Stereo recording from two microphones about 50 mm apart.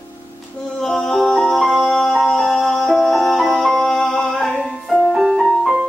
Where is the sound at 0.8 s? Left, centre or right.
Centre.